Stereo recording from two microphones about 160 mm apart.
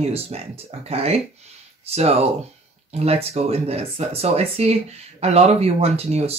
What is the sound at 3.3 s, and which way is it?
Speech, 40° right (ahead or behind).